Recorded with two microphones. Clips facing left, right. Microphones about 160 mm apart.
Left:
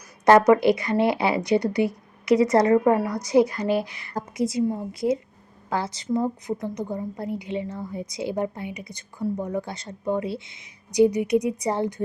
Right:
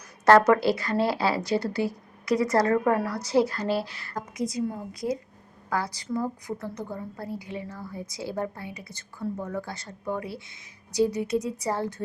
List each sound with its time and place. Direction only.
0.3 s speech: 15° left (ahead or behind)
4.1 s a woman's voice: 30° left (ahead or behind)